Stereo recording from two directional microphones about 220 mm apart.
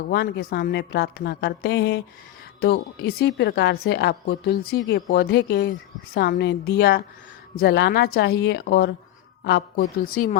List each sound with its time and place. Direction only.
0.1 s speech: 45° left (ahead or behind)